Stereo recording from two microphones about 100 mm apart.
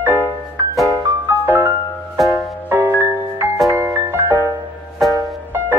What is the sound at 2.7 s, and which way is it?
Music, 20° right (ahead or behind).